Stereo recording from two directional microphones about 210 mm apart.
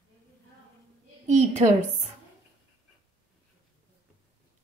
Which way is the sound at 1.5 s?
30° right (ahead or behind).